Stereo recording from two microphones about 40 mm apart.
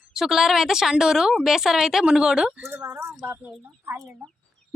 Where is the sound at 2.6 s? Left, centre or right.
Right.